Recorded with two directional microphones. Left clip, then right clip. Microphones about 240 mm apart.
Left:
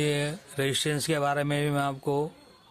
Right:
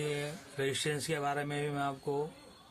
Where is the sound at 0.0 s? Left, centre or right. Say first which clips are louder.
Left 8 dB; left.